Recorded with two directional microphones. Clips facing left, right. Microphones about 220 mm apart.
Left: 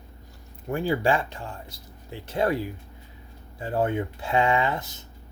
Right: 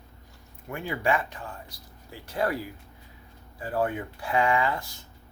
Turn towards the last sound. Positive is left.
turn(degrees=20)  # may be behind; listen again after turning